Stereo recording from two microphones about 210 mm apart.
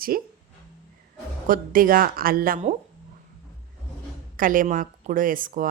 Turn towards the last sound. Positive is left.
turn(degrees=-40)  # may be behind; listen again after turning